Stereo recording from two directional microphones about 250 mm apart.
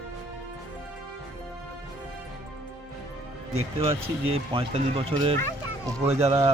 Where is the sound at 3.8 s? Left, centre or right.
Right.